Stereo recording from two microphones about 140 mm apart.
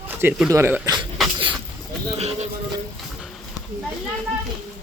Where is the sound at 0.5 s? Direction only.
20° right (ahead or behind).